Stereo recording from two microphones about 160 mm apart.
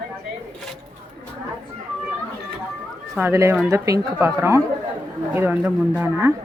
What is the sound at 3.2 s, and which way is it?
Speech, 15° right (ahead or behind).